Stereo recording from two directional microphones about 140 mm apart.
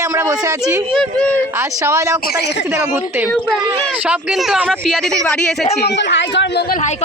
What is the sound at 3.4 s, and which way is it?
Speech, centre (ahead or behind).